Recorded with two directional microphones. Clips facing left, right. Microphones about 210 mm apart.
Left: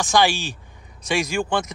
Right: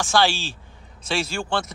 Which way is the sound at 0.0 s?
15° left (ahead or behind).